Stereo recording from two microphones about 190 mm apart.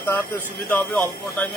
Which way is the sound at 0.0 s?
10° left (ahead or behind).